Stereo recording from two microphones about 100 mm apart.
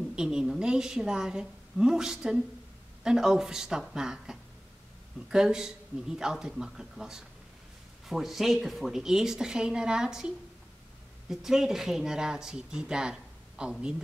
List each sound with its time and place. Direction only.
0.1 s a woman's voice: 10° right (ahead or behind)